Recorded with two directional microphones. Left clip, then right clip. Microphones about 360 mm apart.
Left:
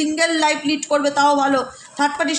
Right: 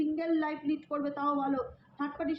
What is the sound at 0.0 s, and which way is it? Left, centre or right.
A woman's voice, left.